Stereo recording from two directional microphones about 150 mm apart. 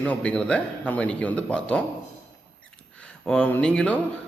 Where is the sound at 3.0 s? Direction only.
5° left (ahead or behind).